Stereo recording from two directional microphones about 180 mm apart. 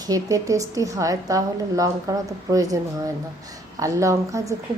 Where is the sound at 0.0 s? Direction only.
20° right (ahead or behind).